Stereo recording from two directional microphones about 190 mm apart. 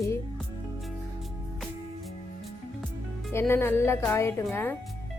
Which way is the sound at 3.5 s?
10° left (ahead or behind).